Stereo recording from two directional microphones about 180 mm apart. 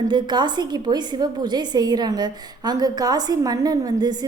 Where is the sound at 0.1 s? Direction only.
25° right (ahead or behind).